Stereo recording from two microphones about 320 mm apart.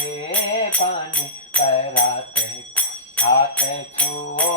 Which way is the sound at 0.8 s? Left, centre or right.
Left.